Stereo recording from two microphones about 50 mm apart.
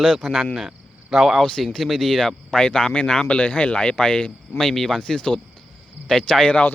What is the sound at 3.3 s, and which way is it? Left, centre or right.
Speech, left.